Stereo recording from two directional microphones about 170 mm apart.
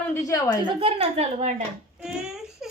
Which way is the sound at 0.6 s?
30° right (ahead or behind).